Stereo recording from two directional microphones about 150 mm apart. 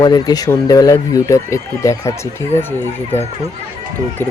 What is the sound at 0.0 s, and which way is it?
Speech, 25° left (ahead or behind).